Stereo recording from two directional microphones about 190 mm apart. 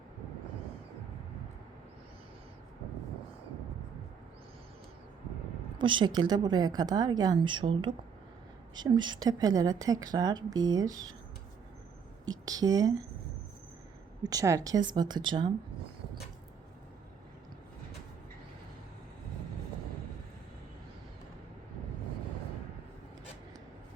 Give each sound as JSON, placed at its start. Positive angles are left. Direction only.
{"t": 5.8, "sound": "a woman's voice", "side_deg": -25}
{"t": 12.3, "sound": "a woman's voice", "side_deg": -20}
{"t": 14.3, "sound": "a woman's voice", "side_deg": -15}